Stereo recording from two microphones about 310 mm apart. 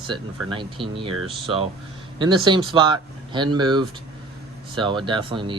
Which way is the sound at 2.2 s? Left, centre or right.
Centre.